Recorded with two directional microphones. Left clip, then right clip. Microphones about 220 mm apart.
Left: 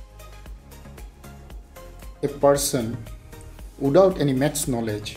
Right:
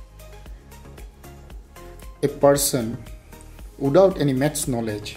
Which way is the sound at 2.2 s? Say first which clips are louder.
Right 2 dB; 20° right (ahead or behind).